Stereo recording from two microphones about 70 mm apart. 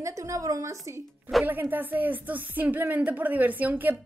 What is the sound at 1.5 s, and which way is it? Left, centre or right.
Speech, right.